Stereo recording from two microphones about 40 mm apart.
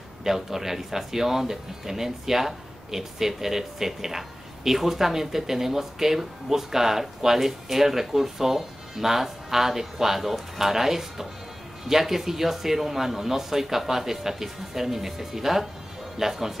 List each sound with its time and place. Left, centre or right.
0.2 s speech: centre